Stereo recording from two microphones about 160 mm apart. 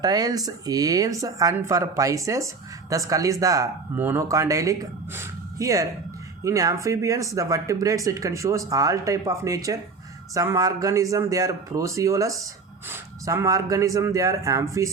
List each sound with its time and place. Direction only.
0.0 s speech: 25° right (ahead or behind)